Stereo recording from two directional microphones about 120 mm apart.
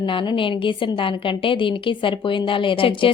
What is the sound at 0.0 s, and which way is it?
A woman's voice, 45° left (ahead or behind).